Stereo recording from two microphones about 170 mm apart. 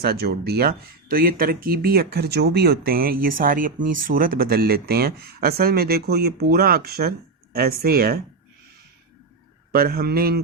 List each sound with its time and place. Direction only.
0.0 s speech: 70° right (ahead or behind)
9.7 s speech: 60° right (ahead or behind)